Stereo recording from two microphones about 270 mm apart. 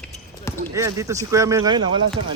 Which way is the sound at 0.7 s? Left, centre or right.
Centre.